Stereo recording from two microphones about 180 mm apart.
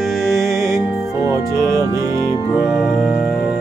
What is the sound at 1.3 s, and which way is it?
Music, 15° right (ahead or behind).